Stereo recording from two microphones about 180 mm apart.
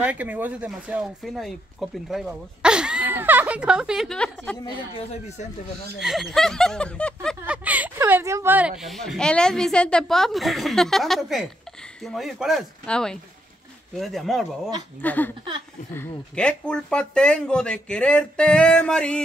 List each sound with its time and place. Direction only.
0.0 s speech: 10° right (ahead or behind)
4.6 s speech: 35° left (ahead or behind)
5.9 s speech: centre (ahead or behind)
7.2 s speech: 5° right (ahead or behind)